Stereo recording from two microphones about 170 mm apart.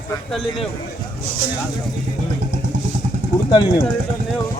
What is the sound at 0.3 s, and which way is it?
Speech, centre (ahead or behind).